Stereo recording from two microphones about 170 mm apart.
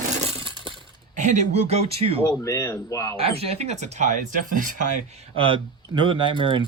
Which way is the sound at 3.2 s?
35° right (ahead or behind).